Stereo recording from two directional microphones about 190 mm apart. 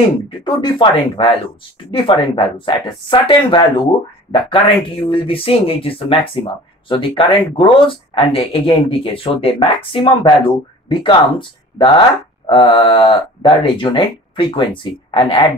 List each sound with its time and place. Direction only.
0.5 s speech: 25° left (ahead or behind)